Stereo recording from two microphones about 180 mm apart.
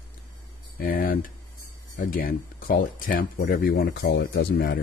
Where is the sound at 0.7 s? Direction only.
50° left (ahead or behind).